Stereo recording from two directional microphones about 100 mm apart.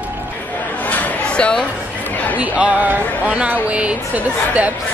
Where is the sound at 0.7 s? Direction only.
15° left (ahead or behind).